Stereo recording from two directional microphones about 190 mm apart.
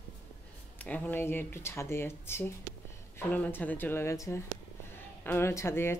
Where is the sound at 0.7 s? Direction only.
5° left (ahead or behind).